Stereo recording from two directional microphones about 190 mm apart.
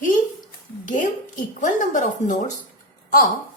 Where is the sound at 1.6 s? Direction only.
40° left (ahead or behind).